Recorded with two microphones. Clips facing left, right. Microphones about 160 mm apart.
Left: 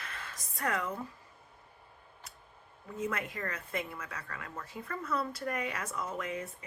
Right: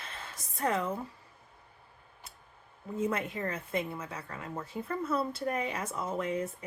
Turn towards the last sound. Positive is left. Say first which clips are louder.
# right 4 dB
turn(degrees=-30)  # may be behind; listen again after turning